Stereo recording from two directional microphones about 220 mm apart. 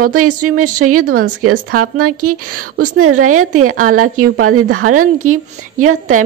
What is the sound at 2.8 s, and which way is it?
Speech, 80° right.